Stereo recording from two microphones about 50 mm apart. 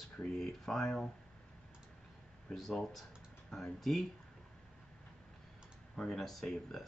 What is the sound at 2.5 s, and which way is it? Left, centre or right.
Speech, centre.